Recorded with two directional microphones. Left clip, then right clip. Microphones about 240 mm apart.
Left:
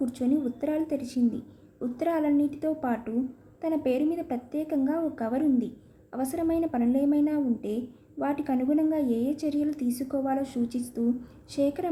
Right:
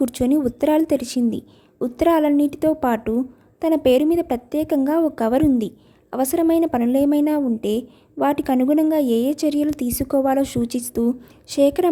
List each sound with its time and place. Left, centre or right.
0.0 s a woman's voice: right